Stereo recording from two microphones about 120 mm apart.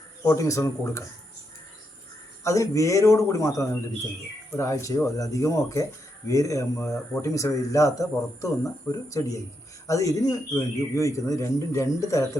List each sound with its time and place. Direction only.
0.3 s speech: 25° left (ahead or behind)
2.4 s speech: 25° left (ahead or behind)